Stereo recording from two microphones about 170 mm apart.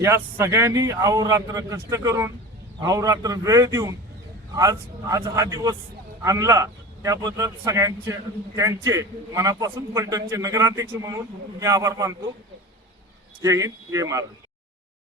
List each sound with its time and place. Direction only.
0.0 s a man's voice: 15° right (ahead or behind)
13.4 s a man's voice: 20° right (ahead or behind)